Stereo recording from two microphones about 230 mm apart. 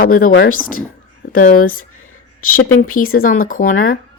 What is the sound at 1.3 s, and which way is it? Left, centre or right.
Speech, left.